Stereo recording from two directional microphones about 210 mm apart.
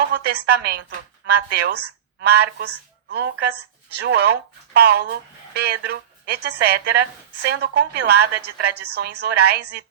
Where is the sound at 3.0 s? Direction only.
50° right (ahead or behind).